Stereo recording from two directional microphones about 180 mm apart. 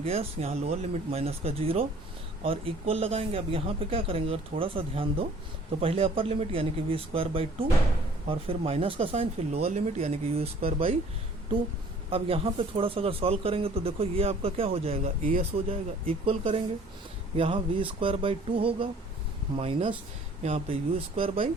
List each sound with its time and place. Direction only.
0.0 s speech: 35° right (ahead or behind)
12.1 s speech: 30° right (ahead or behind)